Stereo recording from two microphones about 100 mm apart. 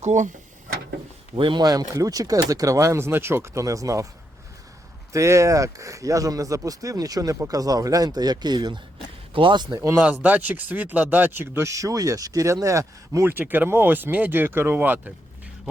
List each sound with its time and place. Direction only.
1.4 s speech: 50° right (ahead or behind); by 4.0 s 35° right (ahead or behind)
5.1 s speech: 30° right (ahead or behind)
9.3 s a man's voice: 55° right (ahead or behind)
9.7 s speech: 30° right (ahead or behind)
10.0 s speech: 15° right (ahead or behind)